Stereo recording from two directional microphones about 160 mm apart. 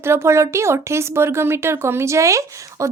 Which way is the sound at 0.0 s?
15° right (ahead or behind).